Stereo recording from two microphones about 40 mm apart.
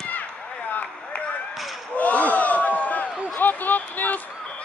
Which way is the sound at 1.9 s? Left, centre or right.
Left.